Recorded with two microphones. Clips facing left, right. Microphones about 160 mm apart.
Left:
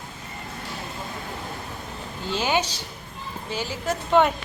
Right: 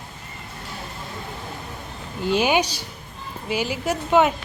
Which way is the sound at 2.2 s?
15° right (ahead or behind).